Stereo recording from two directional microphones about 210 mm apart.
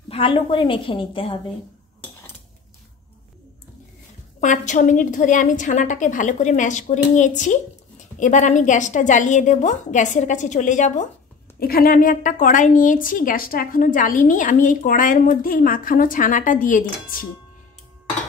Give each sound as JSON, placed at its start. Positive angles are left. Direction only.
{"t": 0.1, "sound": "a woman's voice", "side_deg": 25}
{"t": 4.4, "sound": "a woman's voice", "side_deg": 35}